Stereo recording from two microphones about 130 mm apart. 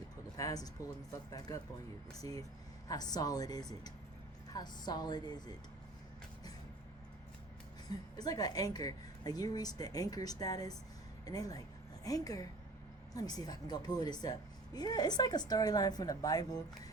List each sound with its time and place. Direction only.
0.3 s a sound: 25° left (ahead or behind)
2.8 s a woman's voice: 30° left (ahead or behind)
7.9 s a woman's voice: 30° left (ahead or behind)